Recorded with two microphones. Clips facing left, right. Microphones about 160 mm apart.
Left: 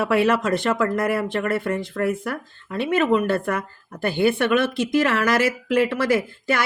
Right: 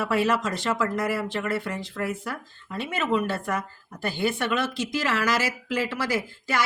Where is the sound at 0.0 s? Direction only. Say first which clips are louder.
Left 5 dB; 60° left (ahead or behind).